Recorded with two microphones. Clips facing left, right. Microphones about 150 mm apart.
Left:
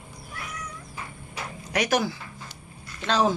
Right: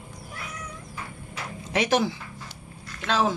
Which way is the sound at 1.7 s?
25° right (ahead or behind).